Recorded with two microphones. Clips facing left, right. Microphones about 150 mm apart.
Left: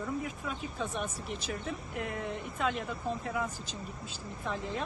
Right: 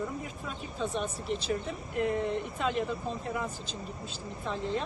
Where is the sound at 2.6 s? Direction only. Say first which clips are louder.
Right 1 dB; centre (ahead or behind).